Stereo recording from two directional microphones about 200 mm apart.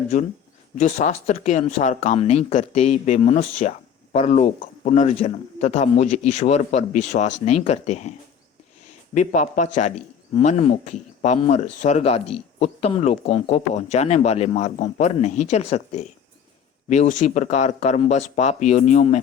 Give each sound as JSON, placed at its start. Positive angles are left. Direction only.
{"t": 0.8, "sound": "speech", "side_deg": 35}
{"t": 9.1, "sound": "speech", "side_deg": 35}